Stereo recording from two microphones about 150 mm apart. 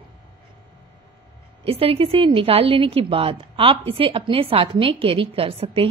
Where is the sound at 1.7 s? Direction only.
40° right (ahead or behind).